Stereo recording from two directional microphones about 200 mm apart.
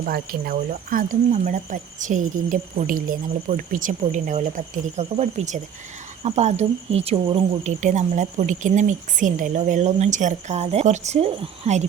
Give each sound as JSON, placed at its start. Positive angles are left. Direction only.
{"t": 0.0, "sound": "speech", "side_deg": -50}